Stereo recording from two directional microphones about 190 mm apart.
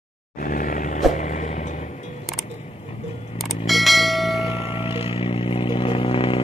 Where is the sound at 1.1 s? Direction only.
40° left (ahead or behind).